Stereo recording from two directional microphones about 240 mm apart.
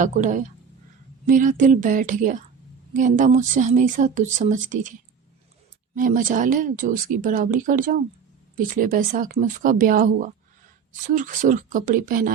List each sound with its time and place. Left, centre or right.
0.0 s speech: right